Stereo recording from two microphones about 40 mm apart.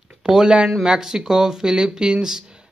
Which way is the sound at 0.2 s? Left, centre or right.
Centre.